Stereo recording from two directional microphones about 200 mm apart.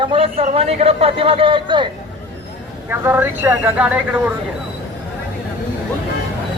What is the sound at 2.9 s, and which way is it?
Speech, 10° right (ahead or behind).